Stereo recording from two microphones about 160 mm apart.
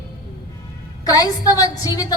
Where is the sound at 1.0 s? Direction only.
25° left (ahead or behind).